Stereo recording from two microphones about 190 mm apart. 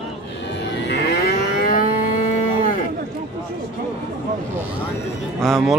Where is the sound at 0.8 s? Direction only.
60° left (ahead or behind).